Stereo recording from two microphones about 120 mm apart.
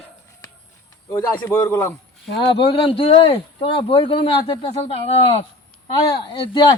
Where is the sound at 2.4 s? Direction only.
50° left (ahead or behind).